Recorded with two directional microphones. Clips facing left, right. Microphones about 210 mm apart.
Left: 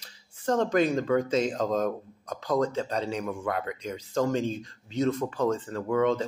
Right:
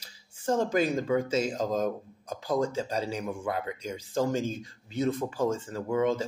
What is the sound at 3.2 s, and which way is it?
Speech, 20° right (ahead or behind).